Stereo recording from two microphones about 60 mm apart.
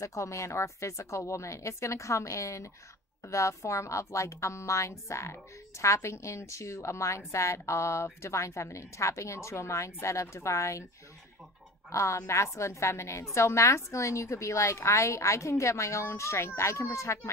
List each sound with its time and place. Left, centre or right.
0.0 s a woman's voice: left
11.9 s a woman's voice: left